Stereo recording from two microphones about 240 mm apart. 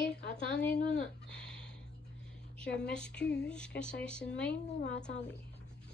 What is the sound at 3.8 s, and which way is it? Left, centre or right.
Speech, centre.